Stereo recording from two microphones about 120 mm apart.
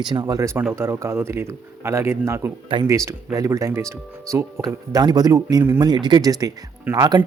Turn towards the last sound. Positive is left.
turn(degrees=-25)  # may be behind; listen again after turning